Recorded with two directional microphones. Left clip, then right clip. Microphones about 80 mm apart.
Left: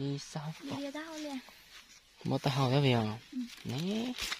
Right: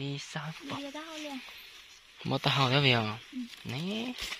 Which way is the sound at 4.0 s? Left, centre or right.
Centre.